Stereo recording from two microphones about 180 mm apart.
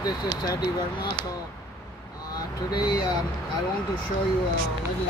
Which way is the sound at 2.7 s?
25° left (ahead or behind).